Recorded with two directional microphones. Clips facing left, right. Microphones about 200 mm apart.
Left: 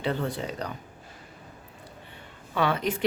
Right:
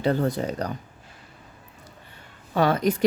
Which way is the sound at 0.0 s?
40° right (ahead or behind).